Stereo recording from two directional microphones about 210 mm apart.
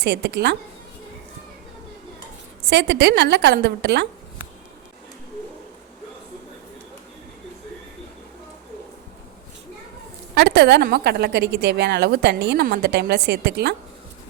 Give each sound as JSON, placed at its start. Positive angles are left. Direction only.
{"t": 0.0, "sound": "a woman's voice", "side_deg": -50}
{"t": 2.6, "sound": "a woman's voice", "side_deg": -55}
{"t": 10.3, "sound": "a woman's voice", "side_deg": -50}